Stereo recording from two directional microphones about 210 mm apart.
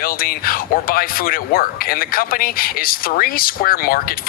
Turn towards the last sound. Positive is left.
turn(degrees=45)  # may be behind; listen again after turning